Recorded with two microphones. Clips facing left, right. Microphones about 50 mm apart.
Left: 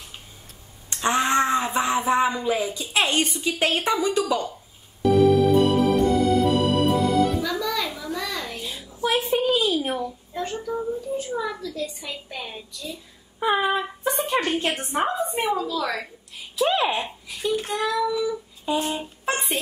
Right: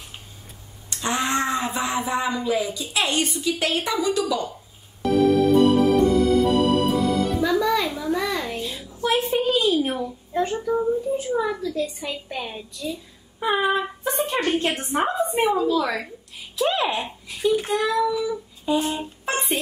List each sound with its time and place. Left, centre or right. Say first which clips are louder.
0.8 s a sound: left 3 dB; left
2.4 s a woman's voice: right 1 dB; left
5.0 s music: left 1 dB; centre
7.4 s music: right 5 dB; centre
7.9 s a sound: right 5 dB; centre
8.5 s a sound: right 2 dB; centre
10.0 s a child's voice: right 5 dB; centre
13.4 s a child's voice: even; centre
15.3 s a woman's voice: right 4 dB; right
15.8 s a child's voice: right 2 dB; centre
16.5 s a child's voice: left 1 dB; centre
18.0 s a sound: right 1 dB; centre